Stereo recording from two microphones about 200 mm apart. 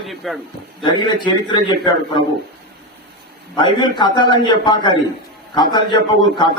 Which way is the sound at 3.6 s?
20° left (ahead or behind).